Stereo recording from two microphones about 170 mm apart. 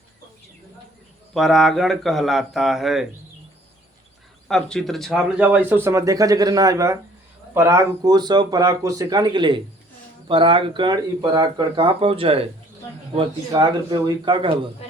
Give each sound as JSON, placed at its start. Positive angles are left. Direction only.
{"t": 1.3, "sound": "speech", "side_deg": 0}
{"t": 4.4, "sound": "speech", "side_deg": 5}
{"t": 13.5, "sound": "speech", "side_deg": -25}